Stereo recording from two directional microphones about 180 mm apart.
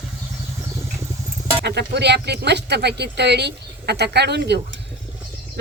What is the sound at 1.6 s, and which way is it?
Speech, 70° right (ahead or behind).